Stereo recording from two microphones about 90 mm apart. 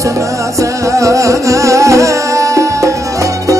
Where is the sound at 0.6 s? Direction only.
35° right (ahead or behind).